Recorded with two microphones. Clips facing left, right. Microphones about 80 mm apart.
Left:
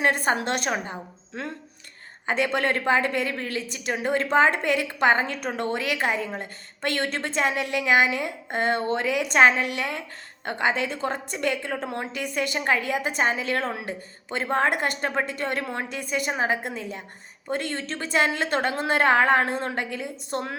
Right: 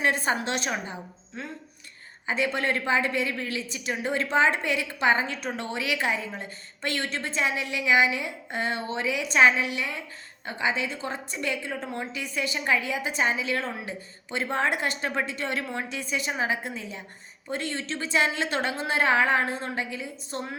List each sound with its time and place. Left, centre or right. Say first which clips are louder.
0.0 s a woman's voice: left 3 dB; left
1.4 s a woman's voice: left 4 dB; left
16.6 s a woman's voice: left 3 dB; left